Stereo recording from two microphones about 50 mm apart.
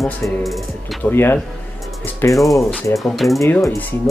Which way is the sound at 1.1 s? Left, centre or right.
Left.